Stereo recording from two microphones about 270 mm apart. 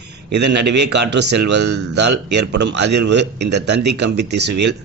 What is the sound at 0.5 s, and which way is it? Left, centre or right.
Speech, right.